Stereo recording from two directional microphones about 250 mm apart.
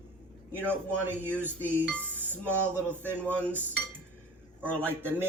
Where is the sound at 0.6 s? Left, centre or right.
Centre.